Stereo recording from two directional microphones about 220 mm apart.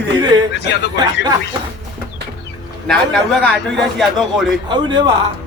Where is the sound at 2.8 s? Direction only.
5° left (ahead or behind).